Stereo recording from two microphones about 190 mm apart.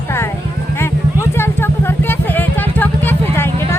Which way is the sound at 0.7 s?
15° left (ahead or behind).